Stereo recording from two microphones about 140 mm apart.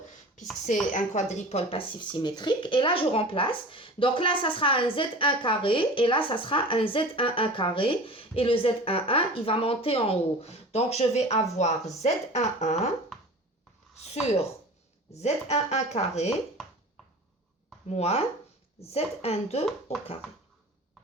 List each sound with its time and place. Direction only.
0.7 s speech: 60° left (ahead or behind)
13.1 s a sound: 5° left (ahead or behind)
13.9 s a woman's voice: 50° left (ahead or behind)
17.8 s speech: 50° left (ahead or behind)